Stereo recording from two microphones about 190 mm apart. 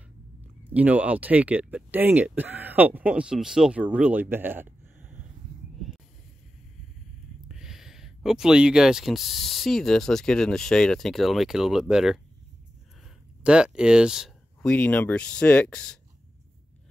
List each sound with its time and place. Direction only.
0.4 s speech: 10° right (ahead or behind)
7.4 s speech: 5° right (ahead or behind)